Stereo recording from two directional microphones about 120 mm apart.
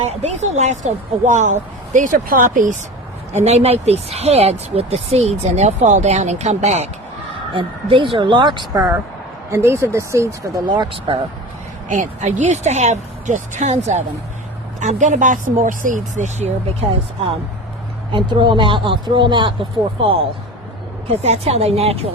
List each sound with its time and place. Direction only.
0.0 s speech: 65° right (ahead or behind); by 2.1 s 90° right
3.3 s speech: 65° right (ahead or behind)
7.5 s speech: 45° right (ahead or behind)
8.7 s speech: 20° right (ahead or behind)
10.7 s speech: 45° right (ahead or behind)
11.9 s speech: 90° right; by 14.0 s 70° right (ahead or behind)
14.8 s speech: 90° right
18.1 s speech: 40° right (ahead or behind)
21.1 s speech: 60° right (ahead or behind)